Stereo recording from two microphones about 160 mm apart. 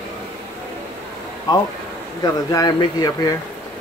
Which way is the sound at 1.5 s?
25° left (ahead or behind).